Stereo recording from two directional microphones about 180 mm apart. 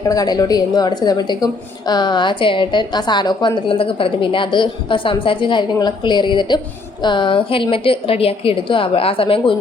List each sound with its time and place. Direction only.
0.1 s a woman's voice: 20° left (ahead or behind)